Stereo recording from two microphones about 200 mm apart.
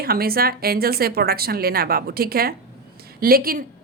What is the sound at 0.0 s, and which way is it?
A woman's voice, 50° right (ahead or behind).